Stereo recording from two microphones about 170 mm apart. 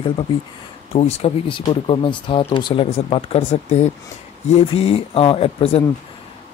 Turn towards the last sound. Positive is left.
turn(degrees=35)  # may be behind; listen again after turning